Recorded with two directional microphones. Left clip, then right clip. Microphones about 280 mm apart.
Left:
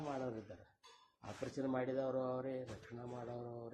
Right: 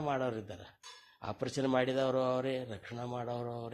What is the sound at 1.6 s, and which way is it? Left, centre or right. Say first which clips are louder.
Speech: right 8 dB; right.